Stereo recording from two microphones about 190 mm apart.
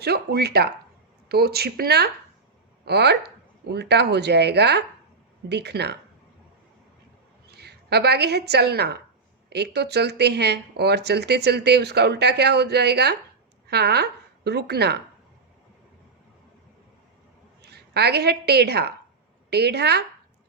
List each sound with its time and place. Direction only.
0.0 s speech: 55° right (ahead or behind)
7.5 s a woman's voice: 60° right (ahead or behind)
17.6 s a woman's voice: 60° right (ahead or behind)